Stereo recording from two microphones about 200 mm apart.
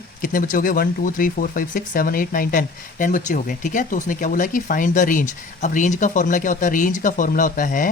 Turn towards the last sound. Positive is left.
turn(degrees=40)  # may be behind; listen again after turning